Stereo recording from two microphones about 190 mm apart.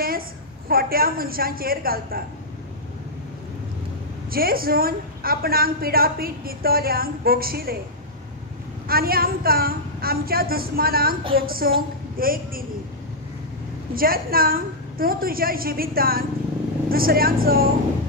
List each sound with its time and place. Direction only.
0.7 s a woman's voice: 50° right (ahead or behind)
4.3 s a woman's voice: 50° right (ahead or behind)
8.8 s a woman's voice: 50° right (ahead or behind)
13.9 s a woman's voice: 50° right (ahead or behind)